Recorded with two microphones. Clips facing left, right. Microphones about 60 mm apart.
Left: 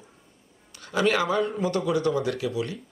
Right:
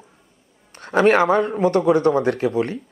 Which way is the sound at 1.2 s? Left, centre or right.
Right.